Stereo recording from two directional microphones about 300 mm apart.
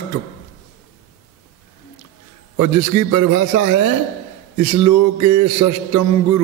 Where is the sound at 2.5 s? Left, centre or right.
Right.